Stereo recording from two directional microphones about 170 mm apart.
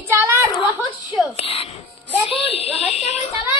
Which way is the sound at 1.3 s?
35° left (ahead or behind).